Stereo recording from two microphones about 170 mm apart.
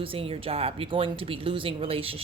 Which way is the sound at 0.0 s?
30° right (ahead or behind).